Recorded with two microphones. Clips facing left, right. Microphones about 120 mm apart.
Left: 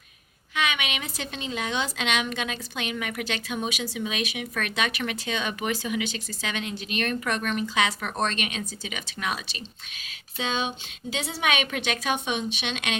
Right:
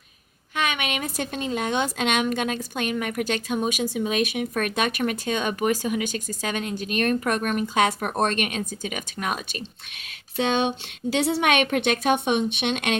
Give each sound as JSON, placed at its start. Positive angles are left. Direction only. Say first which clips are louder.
{"t": 0.5, "sound": "a woman's voice", "louder": "right 2 dB", "side_deg": -45}
{"t": 10.3, "sound": "a woman's voice", "louder": "right 6 dB", "side_deg": -60}